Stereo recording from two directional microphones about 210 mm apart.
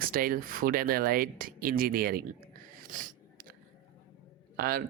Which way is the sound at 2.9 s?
40° right (ahead or behind).